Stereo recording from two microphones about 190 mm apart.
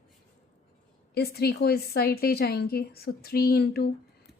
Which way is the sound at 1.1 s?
55° left (ahead or behind).